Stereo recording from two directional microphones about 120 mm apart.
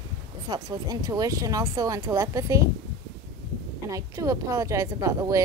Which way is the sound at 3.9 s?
30° right (ahead or behind).